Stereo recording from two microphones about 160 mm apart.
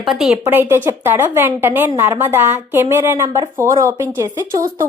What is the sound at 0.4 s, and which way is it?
A woman's voice, 15° right (ahead or behind).